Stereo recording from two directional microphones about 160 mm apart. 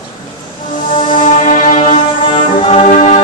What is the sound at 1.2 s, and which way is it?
Music, 50° left (ahead or behind).